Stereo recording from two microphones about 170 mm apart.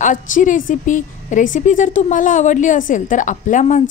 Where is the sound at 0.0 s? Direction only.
50° left (ahead or behind).